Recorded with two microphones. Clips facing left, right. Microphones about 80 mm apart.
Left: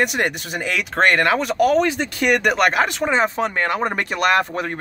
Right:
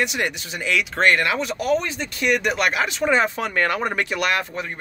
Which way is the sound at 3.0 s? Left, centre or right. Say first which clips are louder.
Left 1 dB; left.